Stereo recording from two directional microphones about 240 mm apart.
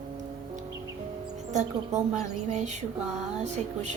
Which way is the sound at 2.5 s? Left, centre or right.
Right.